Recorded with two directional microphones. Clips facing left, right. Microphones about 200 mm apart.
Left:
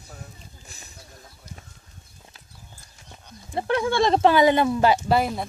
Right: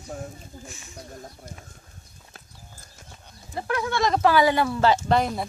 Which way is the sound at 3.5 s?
30° left (ahead or behind).